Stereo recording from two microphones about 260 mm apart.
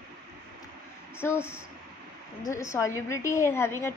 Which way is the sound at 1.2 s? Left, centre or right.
Centre.